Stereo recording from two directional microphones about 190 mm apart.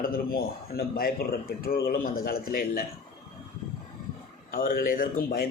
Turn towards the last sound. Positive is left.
turn(degrees=50)  # may be behind; listen again after turning